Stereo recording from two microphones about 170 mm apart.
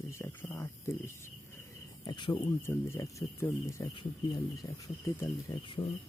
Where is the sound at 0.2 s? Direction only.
15° left (ahead or behind).